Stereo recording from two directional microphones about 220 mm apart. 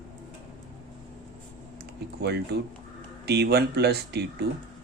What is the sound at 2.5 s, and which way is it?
Speech, 45° right (ahead or behind).